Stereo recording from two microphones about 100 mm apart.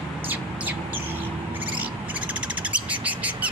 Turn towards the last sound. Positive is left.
turn(degrees=-15)  # may be behind; listen again after turning